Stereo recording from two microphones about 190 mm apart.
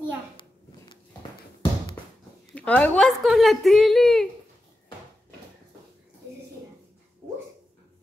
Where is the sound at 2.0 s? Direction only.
20° left (ahead or behind).